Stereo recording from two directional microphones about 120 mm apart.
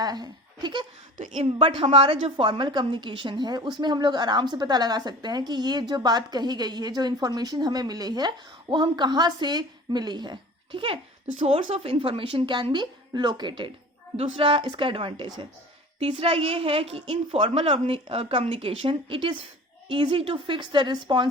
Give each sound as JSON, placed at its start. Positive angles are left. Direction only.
{"t": 0.0, "sound": "speech", "side_deg": -35}
{"t": 1.1, "sound": "a woman's voice", "side_deg": -90}
{"t": 1.5, "sound": "a woman's voice", "side_deg": -45}
{"t": 11.3, "sound": "a woman's voice", "side_deg": -60}